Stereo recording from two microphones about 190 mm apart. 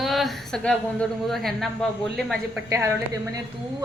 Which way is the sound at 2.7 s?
15° right (ahead or behind).